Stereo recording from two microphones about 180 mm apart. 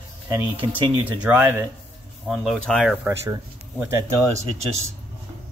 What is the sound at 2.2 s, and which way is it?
Speech, centre (ahead or behind).